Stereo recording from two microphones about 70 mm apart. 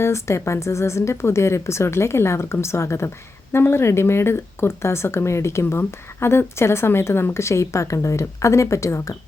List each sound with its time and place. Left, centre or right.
0.0 s speech: left